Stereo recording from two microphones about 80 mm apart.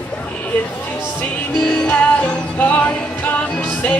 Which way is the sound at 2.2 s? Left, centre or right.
Left.